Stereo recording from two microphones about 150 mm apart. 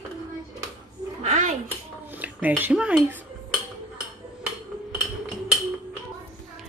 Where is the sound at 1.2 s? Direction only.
50° right (ahead or behind).